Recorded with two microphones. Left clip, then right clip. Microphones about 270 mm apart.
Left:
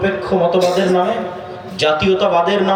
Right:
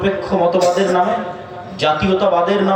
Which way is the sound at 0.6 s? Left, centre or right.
Centre.